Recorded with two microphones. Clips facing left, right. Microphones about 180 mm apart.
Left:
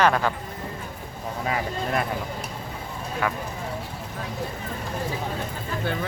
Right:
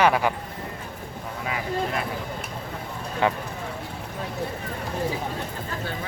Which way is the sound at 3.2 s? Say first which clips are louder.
Right 4 dB; 25° right (ahead or behind).